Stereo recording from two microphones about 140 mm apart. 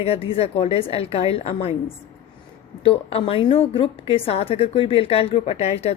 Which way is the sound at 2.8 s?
45° left (ahead or behind).